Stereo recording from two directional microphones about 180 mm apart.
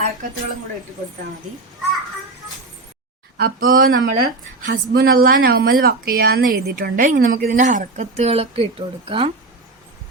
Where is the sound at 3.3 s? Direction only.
55° right (ahead or behind); by 9.3 s 30° right (ahead or behind).